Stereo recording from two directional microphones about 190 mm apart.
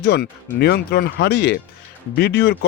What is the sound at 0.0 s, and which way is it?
Speech, 60° left (ahead or behind).